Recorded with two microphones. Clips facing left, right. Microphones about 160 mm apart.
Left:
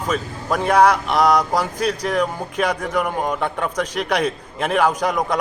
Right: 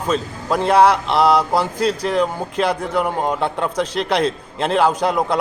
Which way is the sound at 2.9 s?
25° right (ahead or behind).